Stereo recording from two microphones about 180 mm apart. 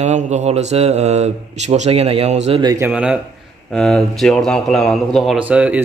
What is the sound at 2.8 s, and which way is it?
Speech, 5° right (ahead or behind).